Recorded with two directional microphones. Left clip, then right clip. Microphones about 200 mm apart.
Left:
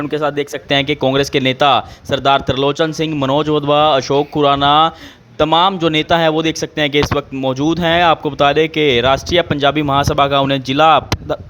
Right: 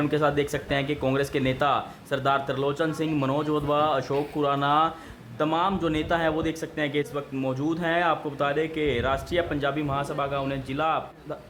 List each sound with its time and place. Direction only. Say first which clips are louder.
0.0 s speech: left 6 dB; 35° left (ahead or behind)